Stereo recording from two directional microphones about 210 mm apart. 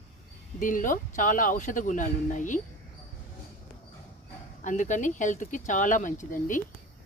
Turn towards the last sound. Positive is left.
turn(degrees=40)  # may be behind; listen again after turning